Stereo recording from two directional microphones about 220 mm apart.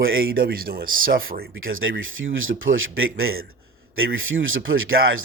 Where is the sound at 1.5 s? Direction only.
65° right (ahead or behind).